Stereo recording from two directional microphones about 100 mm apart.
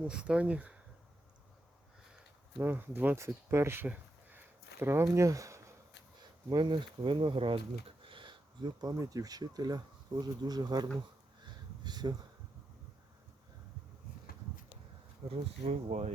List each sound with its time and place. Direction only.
0.0 s speech: 10° right (ahead or behind)
2.6 s speech: 20° right (ahead or behind)
3.8 s a sound: 15° right (ahead or behind)
4.8 s speech: 25° right (ahead or behind)
6.5 s speech: 45° right (ahead or behind)
11.4 s a sound: 45° right (ahead or behind)
15.2 s speech: 90° right